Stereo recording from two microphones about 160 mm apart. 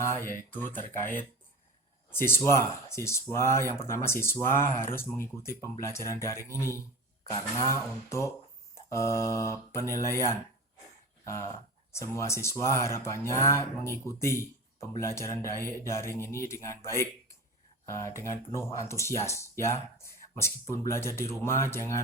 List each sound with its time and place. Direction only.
0.0 s speech: 15° left (ahead or behind)
2.1 s speech: 15° left (ahead or behind)
7.3 s a sound: 20° left (ahead or behind)
8.9 s speech: 15° left (ahead or behind)